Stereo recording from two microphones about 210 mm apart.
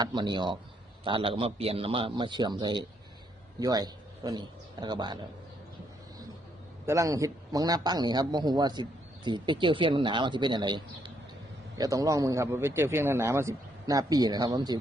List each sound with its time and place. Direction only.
0.0 s a man's voice: 20° right (ahead or behind)
6.8 s a man's voice: 15° right (ahead or behind)